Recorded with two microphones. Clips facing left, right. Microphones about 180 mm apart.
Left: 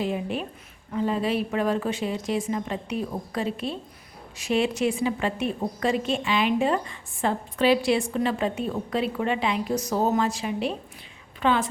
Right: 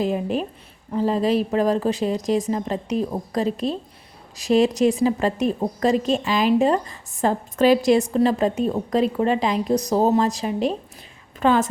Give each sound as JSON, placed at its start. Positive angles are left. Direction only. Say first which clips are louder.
{"t": 0.0, "sound": "a woman's voice", "louder": "right 5 dB", "side_deg": -40}